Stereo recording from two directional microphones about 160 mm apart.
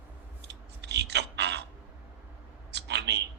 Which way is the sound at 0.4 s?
90° right.